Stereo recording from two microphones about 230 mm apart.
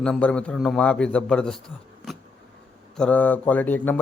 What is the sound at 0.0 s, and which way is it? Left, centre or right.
A man's voice, centre.